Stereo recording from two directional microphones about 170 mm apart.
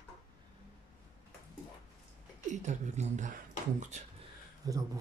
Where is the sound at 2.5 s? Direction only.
40° right (ahead or behind).